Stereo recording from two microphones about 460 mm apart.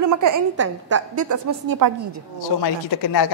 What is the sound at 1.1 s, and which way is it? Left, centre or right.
Speech, right.